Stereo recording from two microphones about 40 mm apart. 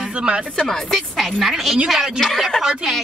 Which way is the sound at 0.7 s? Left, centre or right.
Centre.